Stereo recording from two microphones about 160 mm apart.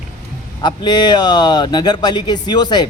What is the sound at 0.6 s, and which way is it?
A man's voice, 30° left (ahead or behind).